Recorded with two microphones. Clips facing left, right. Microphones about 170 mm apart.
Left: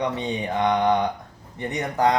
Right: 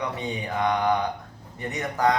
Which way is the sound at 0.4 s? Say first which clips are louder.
Left 3 dB; 30° left (ahead or behind).